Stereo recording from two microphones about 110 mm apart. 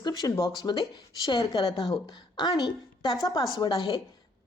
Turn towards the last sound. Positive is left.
turn(degrees=35)  # may be behind; listen again after turning